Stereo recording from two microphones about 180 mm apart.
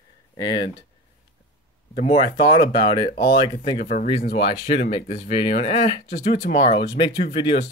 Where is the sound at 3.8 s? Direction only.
35° left (ahead or behind).